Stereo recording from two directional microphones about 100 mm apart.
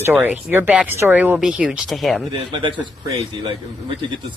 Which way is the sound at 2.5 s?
55° right (ahead or behind).